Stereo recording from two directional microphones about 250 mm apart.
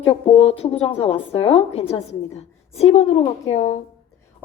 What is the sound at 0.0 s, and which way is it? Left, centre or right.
A woman's voice, left.